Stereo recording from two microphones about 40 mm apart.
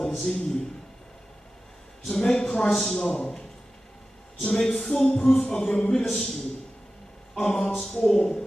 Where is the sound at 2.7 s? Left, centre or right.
Centre.